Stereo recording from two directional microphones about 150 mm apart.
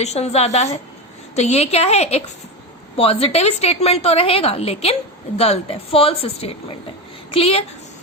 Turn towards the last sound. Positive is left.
turn(degrees=40)  # may be behind; listen again after turning